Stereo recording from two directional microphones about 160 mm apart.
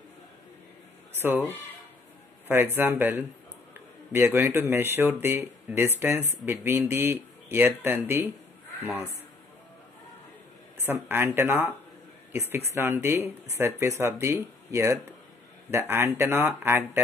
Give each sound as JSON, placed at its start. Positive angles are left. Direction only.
{"t": 2.4, "sound": "speech", "side_deg": -15}
{"t": 10.8, "sound": "speech", "side_deg": -15}